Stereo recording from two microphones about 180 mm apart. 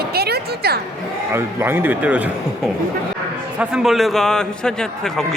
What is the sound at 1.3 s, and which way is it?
Speech, 10° right (ahead or behind).